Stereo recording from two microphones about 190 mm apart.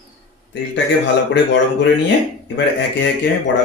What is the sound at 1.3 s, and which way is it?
A man's voice, 65° left (ahead or behind).